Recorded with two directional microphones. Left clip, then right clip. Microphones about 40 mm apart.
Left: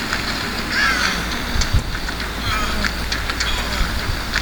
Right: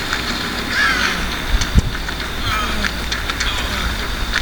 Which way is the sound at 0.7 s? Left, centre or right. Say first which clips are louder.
Right 1 dB; left.